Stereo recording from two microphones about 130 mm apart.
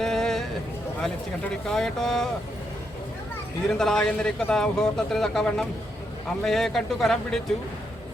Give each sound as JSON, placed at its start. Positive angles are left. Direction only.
{"t": 0.0, "sound": "a sound", "side_deg": 5}
{"t": 1.0, "sound": "speech", "side_deg": 5}
{"t": 3.7, "sound": "speech", "side_deg": 5}